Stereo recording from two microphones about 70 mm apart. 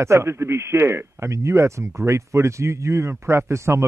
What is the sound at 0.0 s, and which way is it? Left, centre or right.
Speech, right.